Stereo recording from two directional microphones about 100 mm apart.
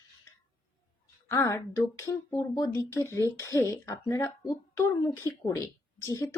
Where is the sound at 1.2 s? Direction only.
30° left (ahead or behind).